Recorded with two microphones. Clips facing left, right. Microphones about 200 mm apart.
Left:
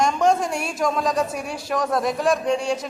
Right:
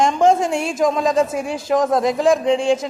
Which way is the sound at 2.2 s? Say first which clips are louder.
Right 6 dB; 90° right.